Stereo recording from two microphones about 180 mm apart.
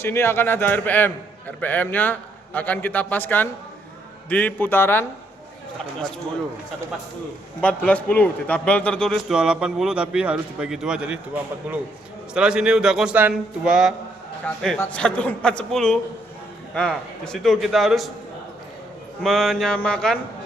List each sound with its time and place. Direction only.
0.0 s a man's voice: 15° left (ahead or behind)
7.6 s a man's voice: 5° left (ahead or behind)
19.2 s a man's voice: centre (ahead or behind)